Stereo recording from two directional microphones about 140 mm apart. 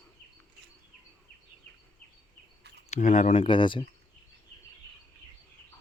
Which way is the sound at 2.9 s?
60° left (ahead or behind).